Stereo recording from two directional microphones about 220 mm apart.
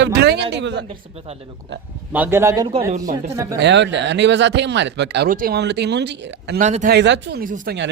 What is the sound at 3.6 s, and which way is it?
Speech, 55° right (ahead or behind).